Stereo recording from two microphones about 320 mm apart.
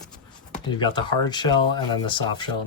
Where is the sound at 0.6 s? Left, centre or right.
Centre.